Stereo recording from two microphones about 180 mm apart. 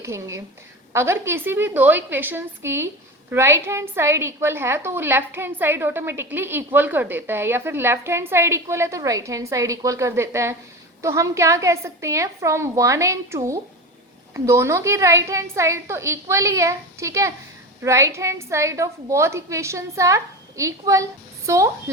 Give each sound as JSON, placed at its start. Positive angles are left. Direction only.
{"t": 0.0, "sound": "a woman's voice", "side_deg": -15}